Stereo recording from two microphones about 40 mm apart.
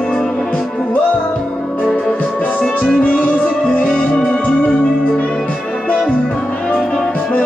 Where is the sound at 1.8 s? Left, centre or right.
Centre.